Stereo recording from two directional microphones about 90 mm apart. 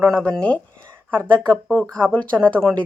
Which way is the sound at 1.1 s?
15° left (ahead or behind).